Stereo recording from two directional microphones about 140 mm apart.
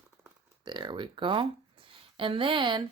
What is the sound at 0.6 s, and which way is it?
Speech, 35° right (ahead or behind).